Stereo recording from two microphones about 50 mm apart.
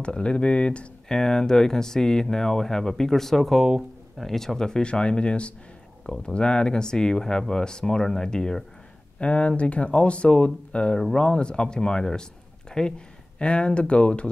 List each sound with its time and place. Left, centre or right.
0.0 s speech: left